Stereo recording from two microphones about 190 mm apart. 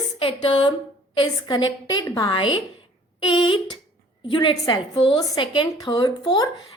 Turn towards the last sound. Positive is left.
turn(degrees=20)  # may be behind; listen again after turning